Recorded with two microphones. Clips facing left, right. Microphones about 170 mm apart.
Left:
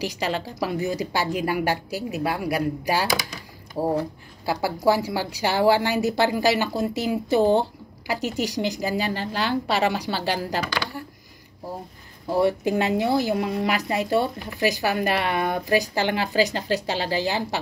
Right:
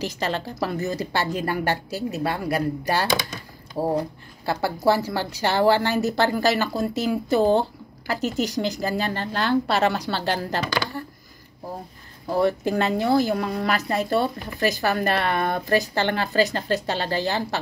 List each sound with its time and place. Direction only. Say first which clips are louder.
0.0 s speech: even; 10° left (ahead or behind)
3.8 s speech: even; 10° right (ahead or behind)
4.5 s speech: even; 10° left (ahead or behind)
12.3 s speech: even; 15° left (ahead or behind)